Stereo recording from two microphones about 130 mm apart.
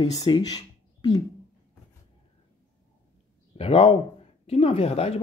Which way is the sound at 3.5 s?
50° left (ahead or behind).